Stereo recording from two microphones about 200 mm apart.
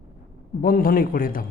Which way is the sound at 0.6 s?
45° left (ahead or behind).